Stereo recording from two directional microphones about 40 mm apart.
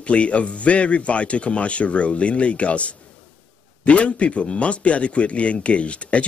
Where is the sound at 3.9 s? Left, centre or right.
Left.